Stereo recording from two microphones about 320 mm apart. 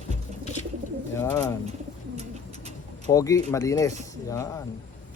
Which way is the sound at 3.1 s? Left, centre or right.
Centre.